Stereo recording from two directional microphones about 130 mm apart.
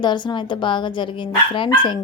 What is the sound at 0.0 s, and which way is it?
A woman's voice, 35° left (ahead or behind).